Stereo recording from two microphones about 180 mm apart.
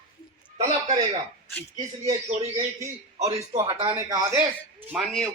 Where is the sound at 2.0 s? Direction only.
40° right (ahead or behind).